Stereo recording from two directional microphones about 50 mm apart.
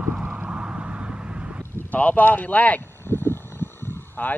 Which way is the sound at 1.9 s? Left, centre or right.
Left.